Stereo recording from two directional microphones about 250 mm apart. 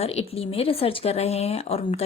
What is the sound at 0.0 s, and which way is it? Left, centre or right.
Speech, left.